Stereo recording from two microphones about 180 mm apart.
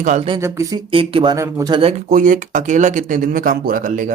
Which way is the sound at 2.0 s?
45° right (ahead or behind).